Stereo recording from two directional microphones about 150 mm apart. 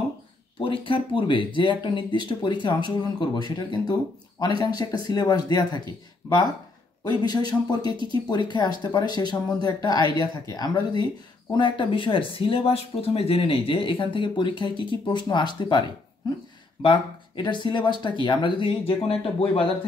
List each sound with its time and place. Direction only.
0.6 s speech: 35° left (ahead or behind)
16.8 s speech: 30° left (ahead or behind)